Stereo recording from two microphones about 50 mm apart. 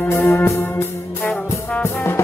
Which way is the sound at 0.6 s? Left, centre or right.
Left.